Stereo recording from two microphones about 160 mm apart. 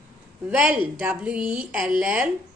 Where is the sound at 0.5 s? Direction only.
10° right (ahead or behind).